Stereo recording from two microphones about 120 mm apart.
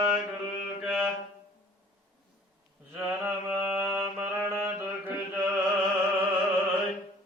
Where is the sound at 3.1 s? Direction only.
15° right (ahead or behind).